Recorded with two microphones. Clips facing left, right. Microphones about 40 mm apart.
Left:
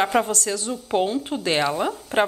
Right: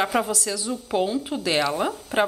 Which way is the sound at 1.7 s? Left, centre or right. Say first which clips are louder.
Left 1 dB; centre.